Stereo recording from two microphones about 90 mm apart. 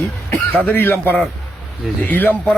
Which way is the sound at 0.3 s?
20° left (ahead or behind).